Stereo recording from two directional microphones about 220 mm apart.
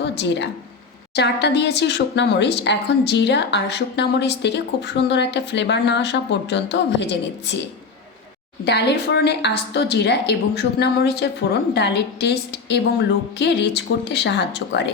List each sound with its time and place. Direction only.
0.0 s speech: 50° left (ahead or behind)
8.6 s speech: 50° left (ahead or behind)